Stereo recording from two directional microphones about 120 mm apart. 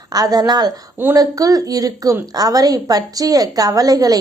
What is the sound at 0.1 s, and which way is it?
A woman's voice, 30° right (ahead or behind).